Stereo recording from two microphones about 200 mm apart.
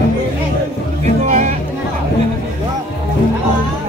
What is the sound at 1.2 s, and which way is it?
Music, 35° right (ahead or behind).